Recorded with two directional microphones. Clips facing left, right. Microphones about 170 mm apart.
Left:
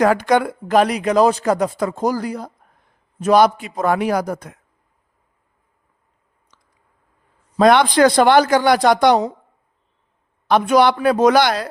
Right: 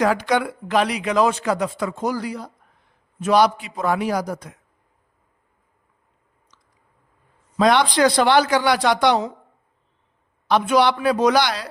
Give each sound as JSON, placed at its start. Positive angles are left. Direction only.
{"t": 0.0, "sound": "speech", "side_deg": 50}
{"t": 3.9, "sound": "speech", "side_deg": 60}
{"t": 6.5, "sound": "chewing", "side_deg": 50}
{"t": 7.6, "sound": "speech", "side_deg": 55}
{"t": 10.5, "sound": "speech", "side_deg": 50}